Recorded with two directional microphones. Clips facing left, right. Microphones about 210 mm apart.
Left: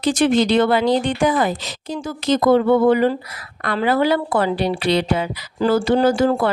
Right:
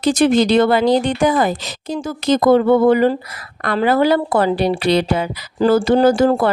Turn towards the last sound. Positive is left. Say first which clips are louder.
# right 3 dB
turn(degrees=-40)  # may be behind; listen again after turning